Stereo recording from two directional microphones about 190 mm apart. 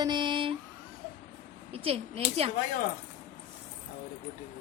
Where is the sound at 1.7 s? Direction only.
30° right (ahead or behind).